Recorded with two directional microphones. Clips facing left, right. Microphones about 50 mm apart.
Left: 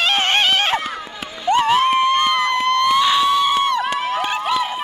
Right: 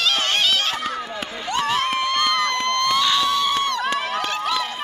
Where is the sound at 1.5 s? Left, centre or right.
Centre.